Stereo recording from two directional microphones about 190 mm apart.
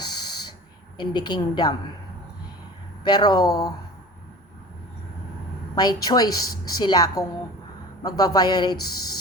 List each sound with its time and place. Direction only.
0.9 s a woman's voice: 25° left (ahead or behind)
3.0 s a woman's voice: 20° left (ahead or behind)
5.7 s a woman's voice: 20° left (ahead or behind)